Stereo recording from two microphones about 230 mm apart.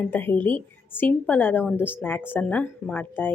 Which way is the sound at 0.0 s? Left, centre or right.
Centre.